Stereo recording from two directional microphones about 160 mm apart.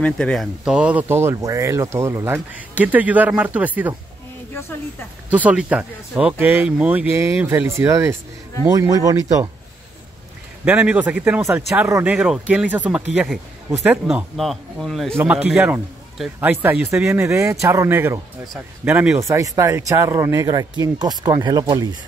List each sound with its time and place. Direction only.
0.0 s speech: 5° left (ahead or behind)
5.3 s speech: 10° right (ahead or behind)
10.6 s speech: 10° right (ahead or behind)
15.1 s speech: 10° right (ahead or behind); by 21.8 s 25° right (ahead or behind)